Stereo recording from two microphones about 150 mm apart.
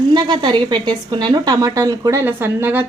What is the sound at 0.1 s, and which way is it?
A woman's voice, 30° right (ahead or behind).